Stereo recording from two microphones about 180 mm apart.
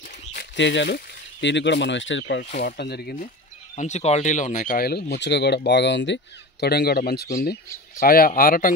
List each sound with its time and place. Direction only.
0.4 s speech: 90° left
2.6 s speech: 65° left (ahead or behind)
3.7 s a man's voice: 40° left (ahead or behind)